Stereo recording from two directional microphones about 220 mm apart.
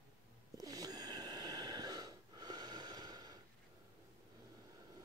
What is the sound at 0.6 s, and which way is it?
Wheeze, 15° right (ahead or behind).